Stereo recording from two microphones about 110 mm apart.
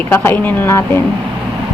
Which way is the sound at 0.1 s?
20° left (ahead or behind).